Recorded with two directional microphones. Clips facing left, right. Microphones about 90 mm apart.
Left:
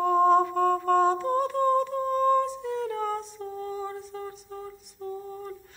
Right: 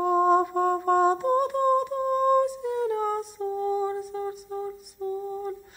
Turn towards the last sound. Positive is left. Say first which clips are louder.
# right 6 dB
turn(degrees=-15)  # may be behind; listen again after turning